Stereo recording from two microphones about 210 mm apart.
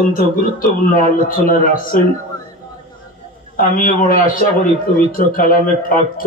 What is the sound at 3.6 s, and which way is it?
A man's voice, 40° left (ahead or behind).